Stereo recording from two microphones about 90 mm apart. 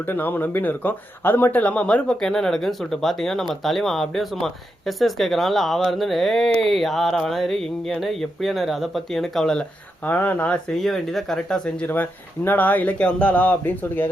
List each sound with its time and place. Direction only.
0.1 s speech: 20° left (ahead or behind)
10.1 s speech: 25° left (ahead or behind)
10.8 s speech: centre (ahead or behind); by 14.1 s 20° left (ahead or behind)